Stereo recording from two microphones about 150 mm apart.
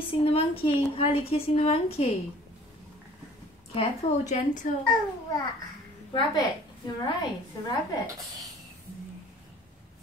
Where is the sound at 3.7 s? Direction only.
45° left (ahead or behind).